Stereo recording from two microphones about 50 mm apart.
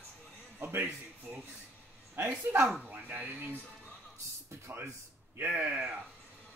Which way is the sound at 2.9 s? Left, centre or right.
Right.